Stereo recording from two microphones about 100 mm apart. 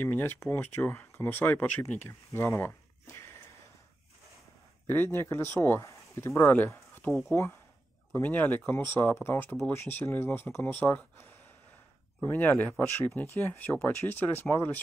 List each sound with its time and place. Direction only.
0.0 s speech: 20° left (ahead or behind)
4.8 s speech: 20° left (ahead or behind)